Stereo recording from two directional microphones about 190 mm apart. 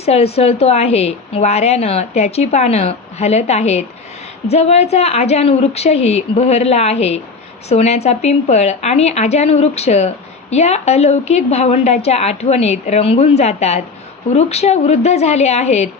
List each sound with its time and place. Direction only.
0.0 s a woman's voice: 35° left (ahead or behind)